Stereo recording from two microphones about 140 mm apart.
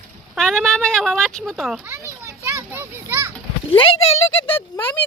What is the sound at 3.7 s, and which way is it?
Speech, 40° left (ahead or behind).